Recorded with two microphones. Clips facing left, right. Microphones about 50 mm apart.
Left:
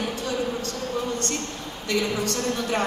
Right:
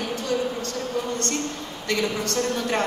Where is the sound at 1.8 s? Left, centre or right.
Right.